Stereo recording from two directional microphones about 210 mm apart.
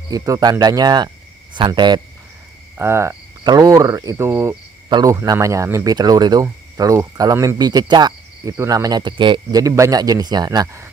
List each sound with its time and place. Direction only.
0.1 s speech: 15° right (ahead or behind)
2.8 s cricket: 10° right (ahead or behind)